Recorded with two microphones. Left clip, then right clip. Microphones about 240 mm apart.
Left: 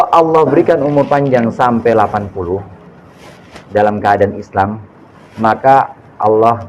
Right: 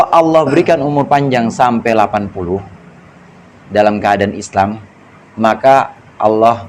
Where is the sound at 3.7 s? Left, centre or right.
Right.